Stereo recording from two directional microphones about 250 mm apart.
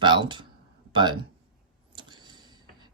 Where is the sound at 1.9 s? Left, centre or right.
Centre.